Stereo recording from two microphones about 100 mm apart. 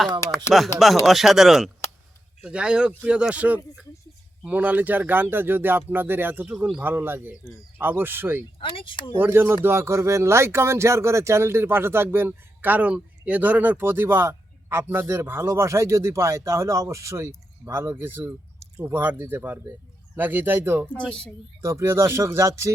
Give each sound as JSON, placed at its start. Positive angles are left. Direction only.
{"t": 0.5, "sound": "speech", "side_deg": 0}
{"t": 8.5, "sound": "speech", "side_deg": 60}
{"t": 9.1, "sound": "speech", "side_deg": -20}
{"t": 21.1, "sound": "a woman's voice", "side_deg": 10}
{"t": 21.6, "sound": "speech", "side_deg": -30}